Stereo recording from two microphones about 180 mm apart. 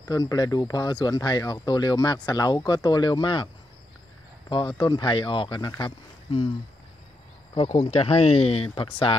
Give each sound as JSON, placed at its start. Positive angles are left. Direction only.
{"t": 0.0, "sound": "speech", "side_deg": 20}
{"t": 4.5, "sound": "speech", "side_deg": 25}
{"t": 7.5, "sound": "speech", "side_deg": 30}